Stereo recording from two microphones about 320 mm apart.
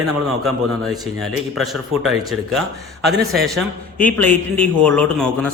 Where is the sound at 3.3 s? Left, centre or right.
Centre.